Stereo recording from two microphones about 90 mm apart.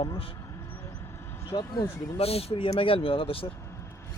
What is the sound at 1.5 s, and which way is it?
Speech, 55° left (ahead or behind).